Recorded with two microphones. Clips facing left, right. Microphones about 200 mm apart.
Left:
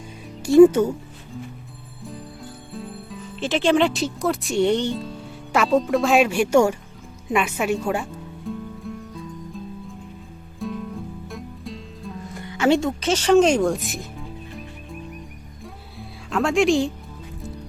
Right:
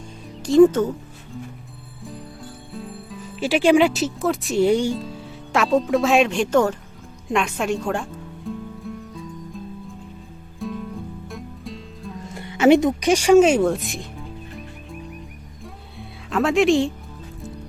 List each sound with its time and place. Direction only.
0.4 s speech: 10° left (ahead or behind)
2.7 s speech: centre (ahead or behind)
7.3 s music: 5° left (ahead or behind)
10.6 s music: centre (ahead or behind)
12.3 s speech: 20° right (ahead or behind); by 14.6 s centre (ahead or behind)
15.6 s music: centre (ahead or behind)